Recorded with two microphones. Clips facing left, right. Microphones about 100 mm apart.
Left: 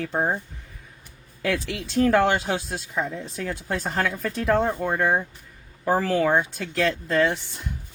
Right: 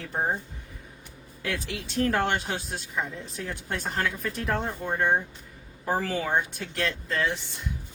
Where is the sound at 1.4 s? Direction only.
70° left (ahead or behind).